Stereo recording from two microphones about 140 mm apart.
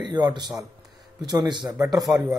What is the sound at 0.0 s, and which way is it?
A man's voice, 30° right (ahead or behind).